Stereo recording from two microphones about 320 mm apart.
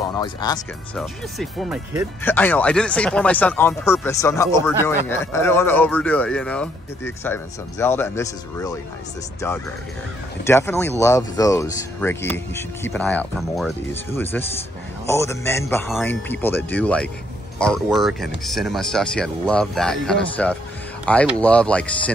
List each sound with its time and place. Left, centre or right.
0.1 s speech: centre
0.9 s speech: centre
10.4 s speech: centre